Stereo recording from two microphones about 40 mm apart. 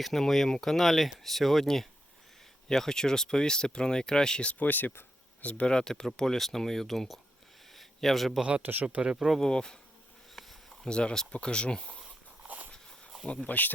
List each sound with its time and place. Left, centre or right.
0.0 s speech: centre
4.6 s speech: left
5.4 s speech: left
5.6 s speech: centre
7.7 s a sound: centre
8.6 s speech: right
9.0 s speech: centre
9.5 s speech: centre
10.3 s a sound: centre
10.8 s speech: left
12.4 s a sound: right
13.2 s speech: left